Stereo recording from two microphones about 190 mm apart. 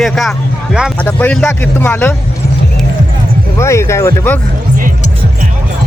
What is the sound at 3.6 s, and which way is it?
Speech, 15° left (ahead or behind).